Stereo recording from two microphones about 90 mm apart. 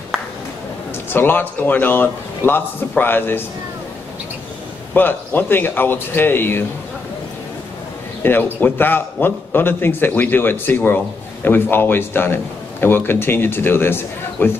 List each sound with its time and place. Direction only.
1.1 s a man's voice: 25° left (ahead or behind)
4.9 s a man's voice: 25° left (ahead or behind)
8.2 s a man's voice: 25° left (ahead or behind)